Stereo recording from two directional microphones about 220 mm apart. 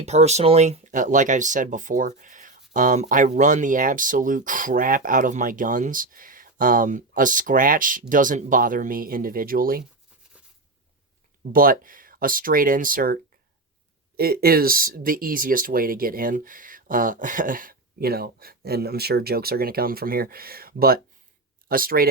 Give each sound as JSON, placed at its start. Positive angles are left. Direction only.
{"t": 0.0, "sound": "speech", "side_deg": -30}
{"t": 11.5, "sound": "speech", "side_deg": -40}
{"t": 14.2, "sound": "speech", "side_deg": -45}